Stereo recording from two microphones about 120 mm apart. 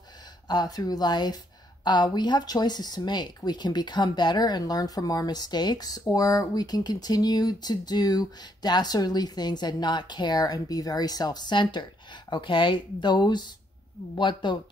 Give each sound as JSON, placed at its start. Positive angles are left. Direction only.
{"t": 0.5, "sound": "speech", "side_deg": 35}